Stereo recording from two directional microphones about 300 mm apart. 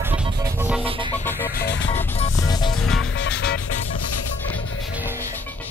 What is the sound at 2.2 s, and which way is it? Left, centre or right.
Music, centre.